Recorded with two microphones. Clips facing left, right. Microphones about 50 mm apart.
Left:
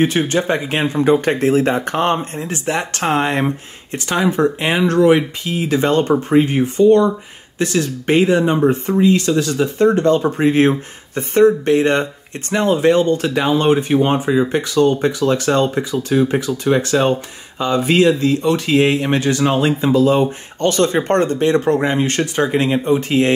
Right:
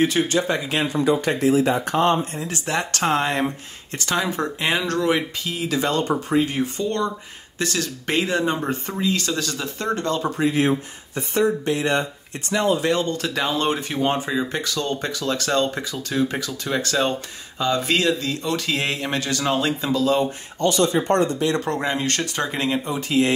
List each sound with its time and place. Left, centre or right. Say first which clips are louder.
0.0 s speech: left 4 dB; left
10.3 s speech: left 6 dB; left
20.6 s speech: left 4 dB; left
21.5 s speech: left 8 dB; left
22.8 s speech: left 6 dB; left